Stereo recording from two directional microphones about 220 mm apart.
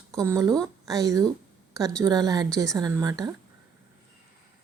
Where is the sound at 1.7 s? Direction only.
15° right (ahead or behind).